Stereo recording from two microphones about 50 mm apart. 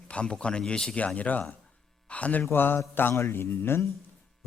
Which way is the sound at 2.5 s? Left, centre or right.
Left.